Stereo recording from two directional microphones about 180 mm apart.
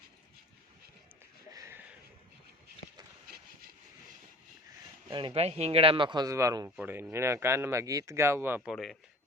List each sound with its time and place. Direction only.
1.5 s a sound: 15° right (ahead or behind)
5.1 s a man's voice: 30° right (ahead or behind); by 8.7 s 10° right (ahead or behind)
8.7 s speech: centre (ahead or behind)